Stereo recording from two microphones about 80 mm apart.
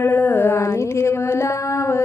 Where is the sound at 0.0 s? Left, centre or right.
Left.